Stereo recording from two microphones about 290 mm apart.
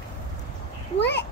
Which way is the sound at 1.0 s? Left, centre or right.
Left.